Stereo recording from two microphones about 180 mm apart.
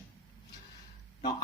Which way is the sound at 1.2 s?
25° left (ahead or behind).